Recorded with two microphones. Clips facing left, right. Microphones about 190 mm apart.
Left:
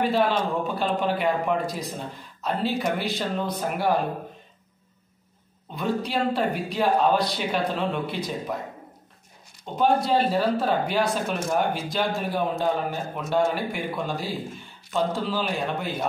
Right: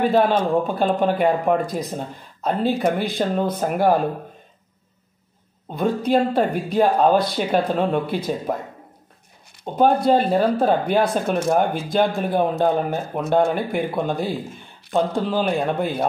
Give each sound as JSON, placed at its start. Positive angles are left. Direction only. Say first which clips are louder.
{"t": 0.1, "sound": "speech", "louder": "right 6 dB", "side_deg": -50}
{"t": 5.8, "sound": "speech", "louder": "right 7 dB", "side_deg": -50}
{"t": 9.7, "sound": "speech", "louder": "right 5 dB", "side_deg": -50}